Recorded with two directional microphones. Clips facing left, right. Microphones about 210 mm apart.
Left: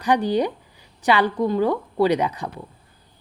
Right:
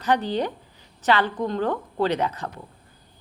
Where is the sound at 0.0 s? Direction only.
15° left (ahead or behind).